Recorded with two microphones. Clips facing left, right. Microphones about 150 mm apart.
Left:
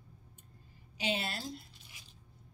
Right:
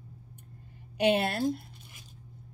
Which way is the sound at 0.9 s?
60° right (ahead or behind).